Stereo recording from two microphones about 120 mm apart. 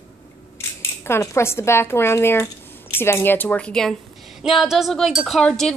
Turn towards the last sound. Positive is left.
turn(degrees=5)  # may be behind; listen again after turning